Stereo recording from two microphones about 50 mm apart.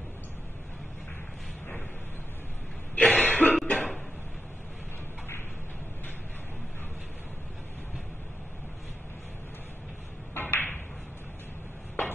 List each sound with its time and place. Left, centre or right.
3.0 s cough: left
3.6 s a sound: left
10.3 s ping: left